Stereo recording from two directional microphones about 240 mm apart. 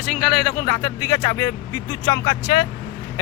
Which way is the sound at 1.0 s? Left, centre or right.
Centre.